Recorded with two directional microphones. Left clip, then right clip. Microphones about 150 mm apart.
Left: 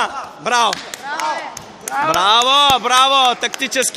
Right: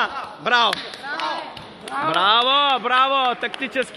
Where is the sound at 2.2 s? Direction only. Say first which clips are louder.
Left 4 dB; 20° left (ahead or behind).